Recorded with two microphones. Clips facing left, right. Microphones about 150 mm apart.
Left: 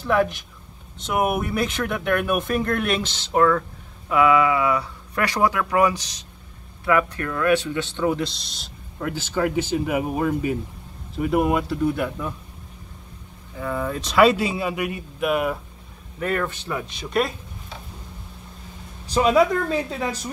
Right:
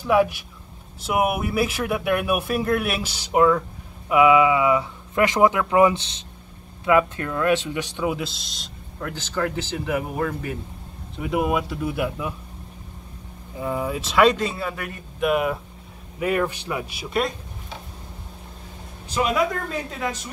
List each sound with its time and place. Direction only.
0.0 s speech: 10° right (ahead or behind); by 10.5 s 10° left (ahead or behind)
11.1 s speech: centre (ahead or behind)
13.6 s speech: 15° right (ahead or behind); by 15.6 s centre (ahead or behind)
16.2 s speech: 15° right (ahead or behind)
19.0 s a woman's voice: 35° left (ahead or behind)